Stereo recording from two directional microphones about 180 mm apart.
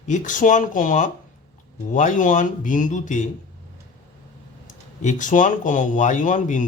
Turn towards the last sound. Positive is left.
turn(degrees=45)  # may be behind; listen again after turning